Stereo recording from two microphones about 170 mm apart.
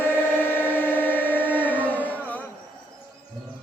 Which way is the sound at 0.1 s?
10° left (ahead or behind).